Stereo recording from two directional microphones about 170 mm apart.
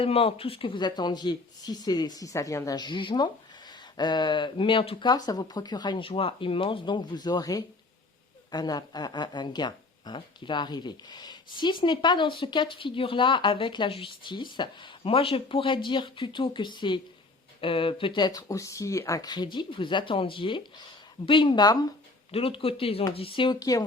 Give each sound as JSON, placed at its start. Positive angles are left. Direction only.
{"t": 0.0, "sound": "a woman's voice", "side_deg": 35}
{"t": 22.3, "sound": "a woman's voice", "side_deg": 35}